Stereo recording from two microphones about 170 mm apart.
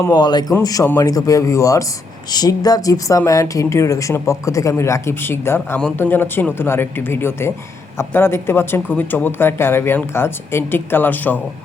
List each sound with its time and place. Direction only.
0.0 s speech: 25° left (ahead or behind)